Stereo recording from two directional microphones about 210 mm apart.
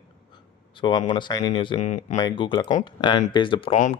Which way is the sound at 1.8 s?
35° left (ahead or behind).